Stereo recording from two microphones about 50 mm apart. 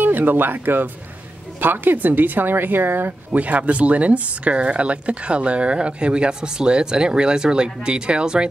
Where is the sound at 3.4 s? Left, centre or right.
Right.